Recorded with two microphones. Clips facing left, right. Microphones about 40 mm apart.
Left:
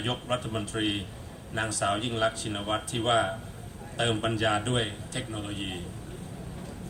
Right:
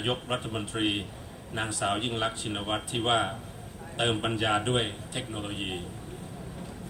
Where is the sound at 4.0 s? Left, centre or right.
Right; by 5.8 s centre.